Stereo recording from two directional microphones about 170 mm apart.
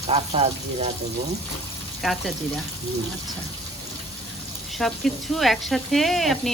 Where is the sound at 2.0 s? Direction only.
Centre (ahead or behind).